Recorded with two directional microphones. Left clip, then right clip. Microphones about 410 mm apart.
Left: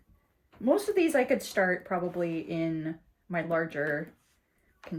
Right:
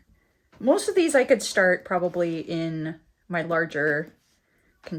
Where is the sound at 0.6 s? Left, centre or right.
Centre.